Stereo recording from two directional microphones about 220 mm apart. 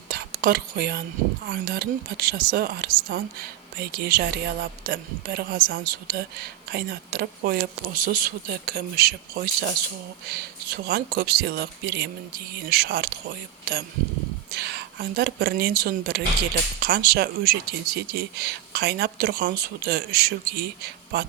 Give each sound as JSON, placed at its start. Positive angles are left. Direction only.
{"t": 0.1, "sound": "speech", "side_deg": -40}